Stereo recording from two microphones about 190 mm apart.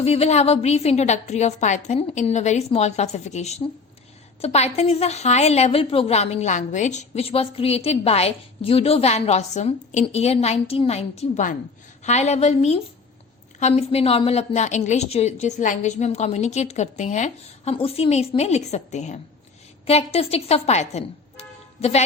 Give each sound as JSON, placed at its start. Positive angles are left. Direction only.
{"t": 0.0, "sound": "a woman's voice", "side_deg": 35}